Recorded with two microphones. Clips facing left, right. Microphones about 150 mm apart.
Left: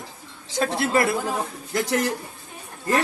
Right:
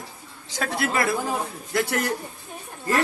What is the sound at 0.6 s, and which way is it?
Speech, 25° left (ahead or behind).